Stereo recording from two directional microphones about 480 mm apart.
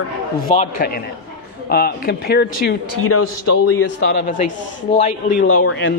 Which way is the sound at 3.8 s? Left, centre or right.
Centre.